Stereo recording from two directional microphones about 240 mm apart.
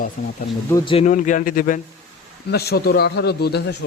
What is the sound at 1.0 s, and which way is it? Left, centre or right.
A man's voice, left.